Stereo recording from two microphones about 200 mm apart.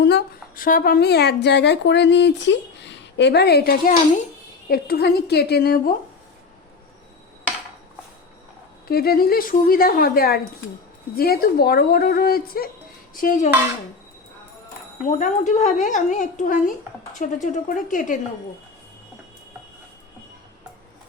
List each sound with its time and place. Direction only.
0.0 s a woman's voice: 50° left (ahead or behind)
8.9 s a woman's voice: 50° left (ahead or behind)
15.0 s speech: 40° left (ahead or behind)